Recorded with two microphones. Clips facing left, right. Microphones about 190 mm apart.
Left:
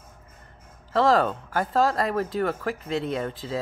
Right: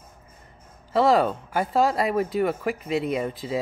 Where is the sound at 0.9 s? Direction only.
10° right (ahead or behind).